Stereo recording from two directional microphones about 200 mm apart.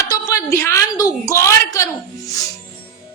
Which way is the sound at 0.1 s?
15° left (ahead or behind).